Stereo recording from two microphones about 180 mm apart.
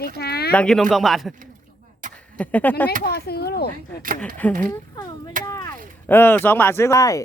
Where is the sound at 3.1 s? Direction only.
60° left (ahead or behind).